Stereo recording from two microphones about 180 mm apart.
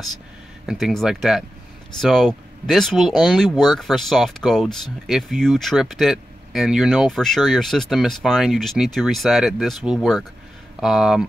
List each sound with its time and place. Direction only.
0.7 s speech: centre (ahead or behind)